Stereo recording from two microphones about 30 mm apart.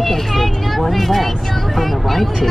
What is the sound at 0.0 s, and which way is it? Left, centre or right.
Speech, centre.